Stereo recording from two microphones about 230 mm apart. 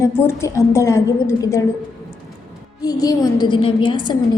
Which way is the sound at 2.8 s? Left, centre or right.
Centre.